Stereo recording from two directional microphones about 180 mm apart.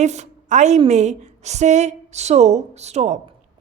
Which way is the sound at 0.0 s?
40° right (ahead or behind).